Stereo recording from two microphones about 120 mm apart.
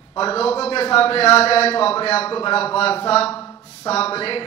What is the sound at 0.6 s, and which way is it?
A man's voice, 55° left (ahead or behind).